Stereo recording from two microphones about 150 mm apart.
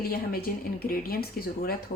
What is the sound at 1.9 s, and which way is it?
Speech, 65° left (ahead or behind).